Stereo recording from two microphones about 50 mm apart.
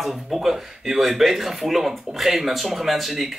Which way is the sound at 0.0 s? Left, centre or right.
Centre.